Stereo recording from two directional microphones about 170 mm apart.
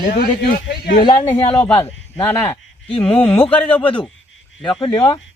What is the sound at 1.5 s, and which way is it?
Speech, 5° left (ahead or behind).